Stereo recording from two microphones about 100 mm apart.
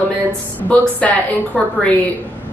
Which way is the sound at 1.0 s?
15° left (ahead or behind).